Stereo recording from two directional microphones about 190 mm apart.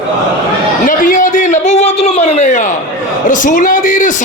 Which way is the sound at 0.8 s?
45° left (ahead or behind).